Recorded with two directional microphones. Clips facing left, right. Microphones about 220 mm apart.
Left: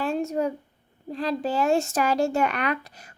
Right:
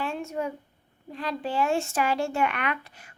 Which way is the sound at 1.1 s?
35° left (ahead or behind).